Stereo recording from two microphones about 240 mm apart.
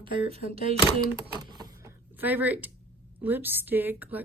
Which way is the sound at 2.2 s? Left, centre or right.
Centre.